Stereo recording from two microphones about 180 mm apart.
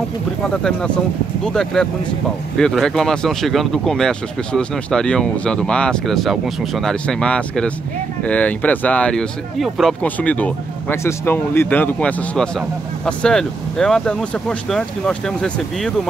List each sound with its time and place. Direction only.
0.7 s speech: 5° left (ahead or behind)